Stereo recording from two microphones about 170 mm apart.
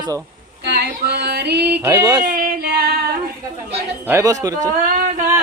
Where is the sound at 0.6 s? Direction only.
70° right (ahead or behind).